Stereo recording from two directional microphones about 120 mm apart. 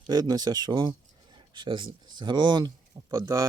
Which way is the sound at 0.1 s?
30° right (ahead or behind).